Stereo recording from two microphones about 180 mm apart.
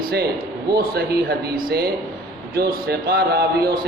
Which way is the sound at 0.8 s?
60° right (ahead or behind).